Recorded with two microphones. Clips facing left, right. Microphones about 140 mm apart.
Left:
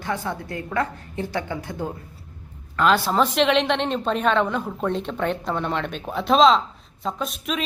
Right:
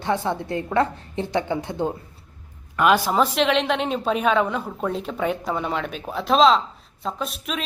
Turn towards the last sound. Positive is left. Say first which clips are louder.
# left 1 dB
turn(degrees=0)  # may be behind; listen again after turning